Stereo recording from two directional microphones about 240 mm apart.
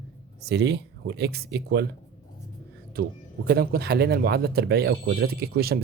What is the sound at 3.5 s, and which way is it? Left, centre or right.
Speech, right.